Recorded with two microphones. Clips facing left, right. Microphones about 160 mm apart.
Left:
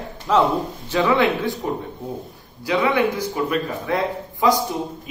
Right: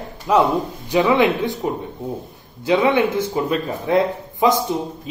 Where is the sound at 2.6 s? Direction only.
25° right (ahead or behind).